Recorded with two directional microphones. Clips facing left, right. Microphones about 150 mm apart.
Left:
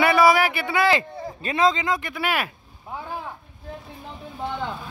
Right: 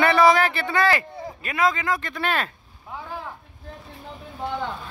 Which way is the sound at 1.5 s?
25° left (ahead or behind).